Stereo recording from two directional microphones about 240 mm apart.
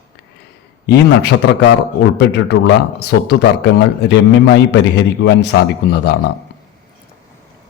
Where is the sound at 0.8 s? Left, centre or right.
Left.